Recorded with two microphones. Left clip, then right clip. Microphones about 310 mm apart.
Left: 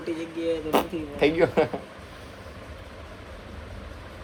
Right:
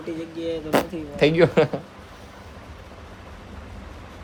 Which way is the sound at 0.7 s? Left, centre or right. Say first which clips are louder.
Right 2 dB; right.